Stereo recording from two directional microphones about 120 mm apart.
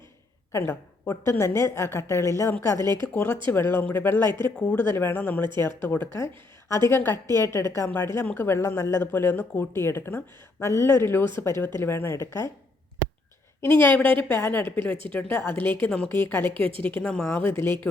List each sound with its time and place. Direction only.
0.5 s a woman's voice: 20° left (ahead or behind)
13.7 s a woman's voice: 15° left (ahead or behind)
16.5 s a woman's voice: 50° right (ahead or behind)
17.0 s a woman's voice: 10° left (ahead or behind)